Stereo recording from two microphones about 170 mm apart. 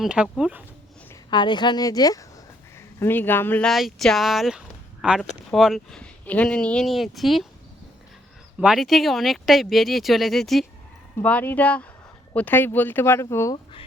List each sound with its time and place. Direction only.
0.0 s speech: 5° right (ahead or behind)
1.3 s speech: 25° left (ahead or behind); by 7.4 s centre (ahead or behind)
8.6 s speech: centre (ahead or behind); by 13.6 s 15° left (ahead or behind)